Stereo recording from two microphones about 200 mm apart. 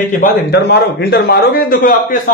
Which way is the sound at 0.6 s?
55° left (ahead or behind).